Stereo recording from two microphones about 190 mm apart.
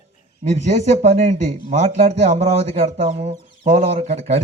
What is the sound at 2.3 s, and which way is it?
Speech, 40° right (ahead or behind).